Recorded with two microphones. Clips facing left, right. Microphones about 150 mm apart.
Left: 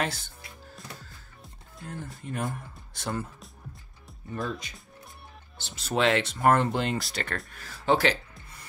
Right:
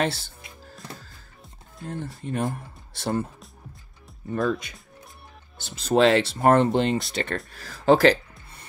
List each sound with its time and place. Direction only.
0.0 s speech: 30° right (ahead or behind)
1.8 s speech: 25° right (ahead or behind)
4.3 s speech: 50° right (ahead or behind)
5.9 s speech: 35° right (ahead or behind)
7.5 s speech: 40° right (ahead or behind)